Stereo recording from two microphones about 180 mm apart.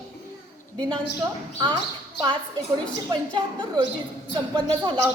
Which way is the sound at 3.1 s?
25° right (ahead or behind).